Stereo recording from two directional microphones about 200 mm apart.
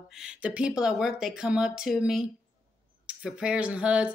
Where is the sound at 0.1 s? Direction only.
5° right (ahead or behind).